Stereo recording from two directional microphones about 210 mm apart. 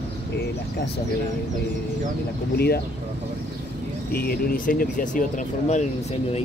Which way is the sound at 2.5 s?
50° left (ahead or behind).